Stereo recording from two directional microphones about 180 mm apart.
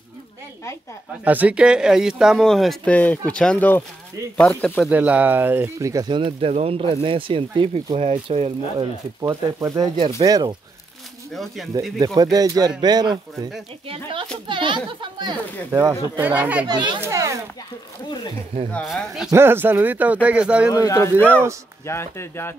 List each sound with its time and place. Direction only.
1.2 s speech: 10° right (ahead or behind); by 4.8 s 10° left (ahead or behind)
4.8 s speech: 10° right (ahead or behind); by 8.8 s 30° right (ahead or behind)
9.2 s speech: 15° right (ahead or behind)
11.3 s speech: centre (ahead or behind)
12.0 s speech: 20° right (ahead or behind)
16.6 s speech: 25° right (ahead or behind)
18.7 s speech: 5° left (ahead or behind)
19.3 s speech: 10° right (ahead or behind)
20.7 s speech: 20° left (ahead or behind)
21.1 s speech: 10° right (ahead or behind)
21.8 s speech: 15° left (ahead or behind)